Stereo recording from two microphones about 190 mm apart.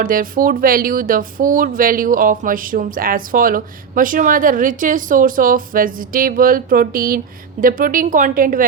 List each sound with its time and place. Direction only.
0.0 s speech: 50° right (ahead or behind)